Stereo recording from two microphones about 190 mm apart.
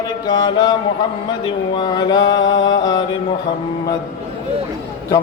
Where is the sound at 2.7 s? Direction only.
20° left (ahead or behind).